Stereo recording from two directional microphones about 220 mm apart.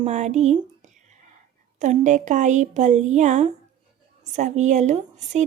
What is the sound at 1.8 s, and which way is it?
Speech, 35° right (ahead or behind).